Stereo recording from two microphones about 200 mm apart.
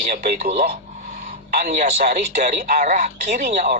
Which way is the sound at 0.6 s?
50° right (ahead or behind).